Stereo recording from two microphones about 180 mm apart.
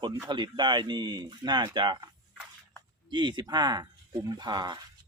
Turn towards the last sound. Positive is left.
turn(degrees=-25)  # may be behind; listen again after turning